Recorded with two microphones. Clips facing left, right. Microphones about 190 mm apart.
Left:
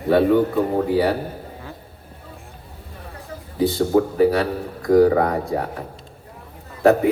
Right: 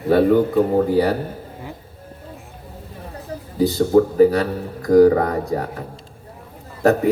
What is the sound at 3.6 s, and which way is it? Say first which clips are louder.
Speech: right 3 dB; 40° right (ahead or behind).